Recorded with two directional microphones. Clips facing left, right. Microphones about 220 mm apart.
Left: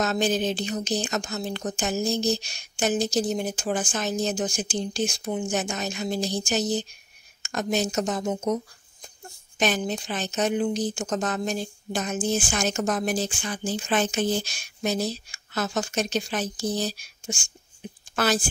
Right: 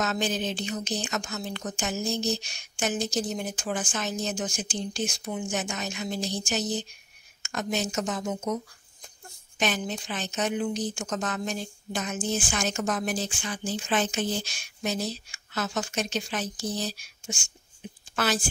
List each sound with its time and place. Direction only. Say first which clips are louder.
0.0 s speech: left 4 dB; 35° left (ahead or behind)
9.6 s a woman's voice: left 4 dB; 40° left (ahead or behind)